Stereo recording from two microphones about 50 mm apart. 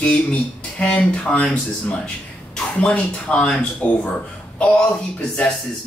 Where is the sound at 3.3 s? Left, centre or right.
Left.